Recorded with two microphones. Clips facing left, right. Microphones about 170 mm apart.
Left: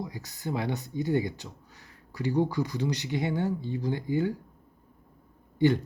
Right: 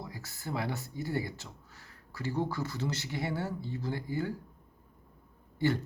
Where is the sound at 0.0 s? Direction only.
20° left (ahead or behind).